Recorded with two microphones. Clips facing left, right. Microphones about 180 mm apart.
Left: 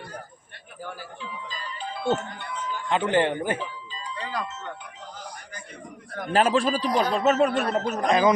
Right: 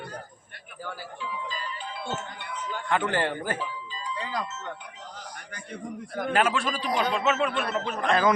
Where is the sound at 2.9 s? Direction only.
20° left (ahead or behind).